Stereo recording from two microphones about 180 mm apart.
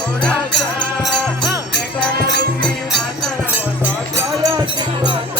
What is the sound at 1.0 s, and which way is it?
Music, centre (ahead or behind).